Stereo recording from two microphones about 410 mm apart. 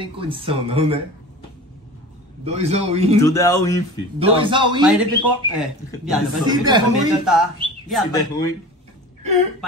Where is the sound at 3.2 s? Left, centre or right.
Centre.